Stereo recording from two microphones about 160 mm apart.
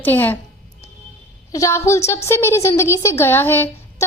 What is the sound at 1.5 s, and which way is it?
Speech, 20° left (ahead or behind).